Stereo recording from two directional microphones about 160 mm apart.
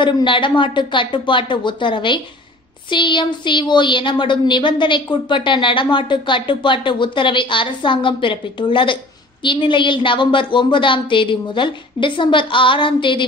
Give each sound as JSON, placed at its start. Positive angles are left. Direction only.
{"t": 0.0, "sound": "a woman's voice", "side_deg": 30}